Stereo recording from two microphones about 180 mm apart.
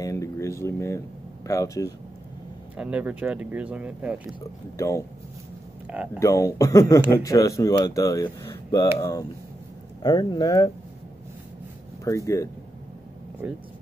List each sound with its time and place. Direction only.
0.0 s speech: 20° left (ahead or behind)
2.8 s speech: 10° right (ahead or behind)
4.7 s speech: 15° left (ahead or behind)
6.1 s speech: 15° left (ahead or behind)
10.0 s speech: 25° left (ahead or behind)
12.0 s speech: 15° left (ahead or behind)
13.4 s speech: 5° right (ahead or behind)